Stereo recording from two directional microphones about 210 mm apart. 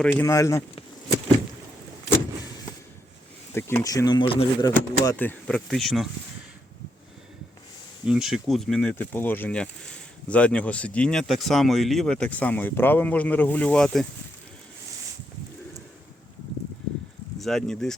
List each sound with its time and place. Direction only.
0.0 s speech: 10° left (ahead or behind)
3.5 s speech: 10° left (ahead or behind)
4.9 s speech: 10° left (ahead or behind)
8.0 s speech: 5° right (ahead or behind)
17.4 s speech: centre (ahead or behind)